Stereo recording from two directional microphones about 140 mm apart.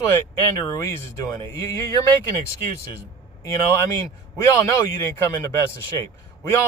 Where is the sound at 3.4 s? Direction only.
20° left (ahead or behind).